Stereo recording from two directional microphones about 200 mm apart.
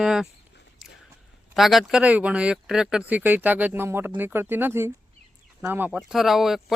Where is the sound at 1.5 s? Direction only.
Centre (ahead or behind).